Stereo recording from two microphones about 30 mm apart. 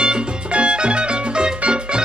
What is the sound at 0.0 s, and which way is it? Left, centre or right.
Music, right.